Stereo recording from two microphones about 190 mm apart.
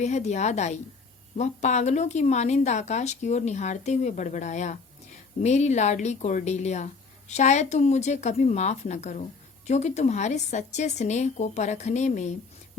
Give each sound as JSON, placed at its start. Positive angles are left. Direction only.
{"t": 0.0, "sound": "speech", "side_deg": 35}